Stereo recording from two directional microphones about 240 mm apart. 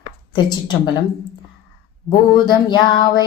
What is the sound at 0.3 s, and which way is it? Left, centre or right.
Speech, centre.